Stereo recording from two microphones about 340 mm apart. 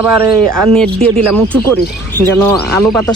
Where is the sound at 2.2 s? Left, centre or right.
Centre.